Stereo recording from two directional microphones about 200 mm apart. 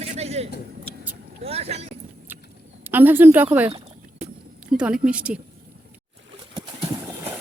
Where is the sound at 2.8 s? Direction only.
10° right (ahead or behind).